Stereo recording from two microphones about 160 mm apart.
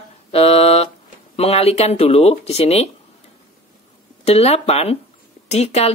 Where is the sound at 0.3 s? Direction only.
40° left (ahead or behind).